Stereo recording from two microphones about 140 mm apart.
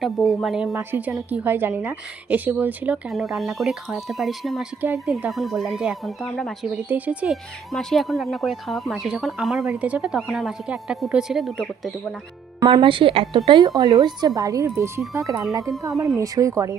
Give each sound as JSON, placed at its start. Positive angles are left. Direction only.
{"t": 0.0, "sound": "speech", "side_deg": 0}
{"t": 0.7, "sound": "a woman's voice", "side_deg": -15}
{"t": 3.1, "sound": "speech", "side_deg": 0}
{"t": 4.8, "sound": "a woman's voice", "side_deg": -10}
{"t": 5.3, "sound": "speech", "side_deg": 0}
{"t": 6.8, "sound": "a woman's voice", "side_deg": -10}
{"t": 7.7, "sound": "speech", "side_deg": 0}
{"t": 12.5, "sound": "speech", "side_deg": -35}